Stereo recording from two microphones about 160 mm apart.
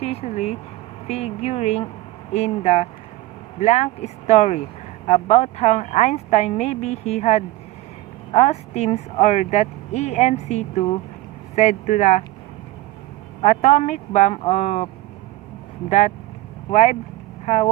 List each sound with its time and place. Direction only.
0.0 s a woman's voice: 40° left (ahead or behind)
13.4 s speech: 45° left (ahead or behind)
15.9 s speech: 45° left (ahead or behind)